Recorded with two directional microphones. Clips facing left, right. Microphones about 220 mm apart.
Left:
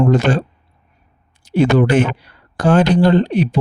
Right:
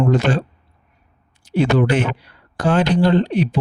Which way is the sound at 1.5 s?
45° left (ahead or behind).